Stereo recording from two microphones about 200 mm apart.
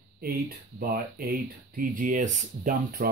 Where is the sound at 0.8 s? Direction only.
50° right (ahead or behind).